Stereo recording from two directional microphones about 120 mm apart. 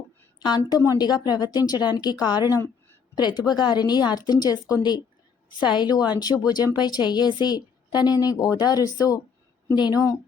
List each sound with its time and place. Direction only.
0.3 s a woman's voice: 35° left (ahead or behind)